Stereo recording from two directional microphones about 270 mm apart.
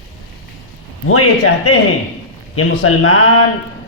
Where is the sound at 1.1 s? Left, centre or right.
Left.